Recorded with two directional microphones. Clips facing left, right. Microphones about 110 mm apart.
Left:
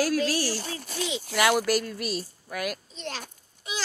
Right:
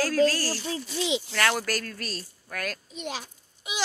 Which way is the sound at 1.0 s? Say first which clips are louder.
Right 6 dB; 20° right (ahead or behind).